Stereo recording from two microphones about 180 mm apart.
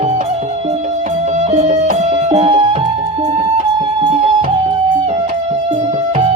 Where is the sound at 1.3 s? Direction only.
35° right (ahead or behind).